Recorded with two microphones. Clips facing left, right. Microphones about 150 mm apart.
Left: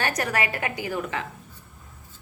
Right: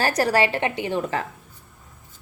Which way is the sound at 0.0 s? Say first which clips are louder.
Right 6 dB; 35° right (ahead or behind).